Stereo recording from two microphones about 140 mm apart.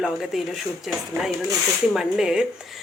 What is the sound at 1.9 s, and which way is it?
Speech, 5° right (ahead or behind).